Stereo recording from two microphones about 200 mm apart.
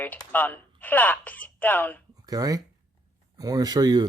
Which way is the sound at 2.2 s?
20° right (ahead or behind).